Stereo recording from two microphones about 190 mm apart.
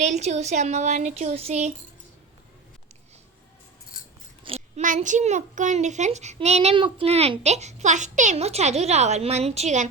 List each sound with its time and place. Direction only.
0.0 s a child's voice: 40° right (ahead or behind)
4.4 s a child's voice: 35° right (ahead or behind)